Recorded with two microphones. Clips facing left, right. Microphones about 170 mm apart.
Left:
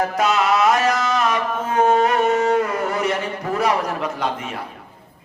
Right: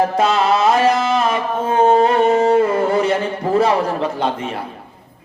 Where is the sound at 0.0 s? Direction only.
30° right (ahead or behind).